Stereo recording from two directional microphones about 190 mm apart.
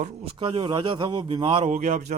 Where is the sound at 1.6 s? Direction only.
40° right (ahead or behind).